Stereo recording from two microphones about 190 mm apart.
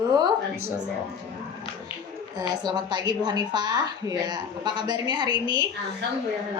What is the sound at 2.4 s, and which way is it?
A woman's voice, 20° right (ahead or behind).